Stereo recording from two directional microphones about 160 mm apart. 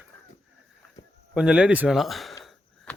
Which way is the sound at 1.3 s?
5° right (ahead or behind).